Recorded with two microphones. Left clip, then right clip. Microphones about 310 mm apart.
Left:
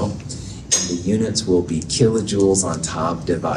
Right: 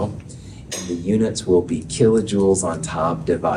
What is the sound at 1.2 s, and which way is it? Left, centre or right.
A man's voice, right.